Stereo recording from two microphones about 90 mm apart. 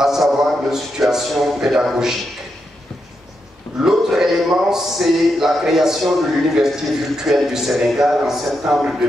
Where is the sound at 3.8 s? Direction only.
5° right (ahead or behind).